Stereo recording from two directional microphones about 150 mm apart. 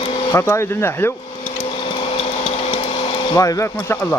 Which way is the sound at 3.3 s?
20° left (ahead or behind).